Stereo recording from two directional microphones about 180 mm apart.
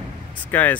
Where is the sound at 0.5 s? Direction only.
10° left (ahead or behind).